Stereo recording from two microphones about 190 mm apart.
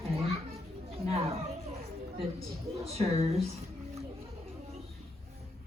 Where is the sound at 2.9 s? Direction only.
35° right (ahead or behind).